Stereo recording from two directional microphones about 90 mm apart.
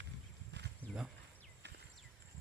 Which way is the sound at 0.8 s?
15° left (ahead or behind).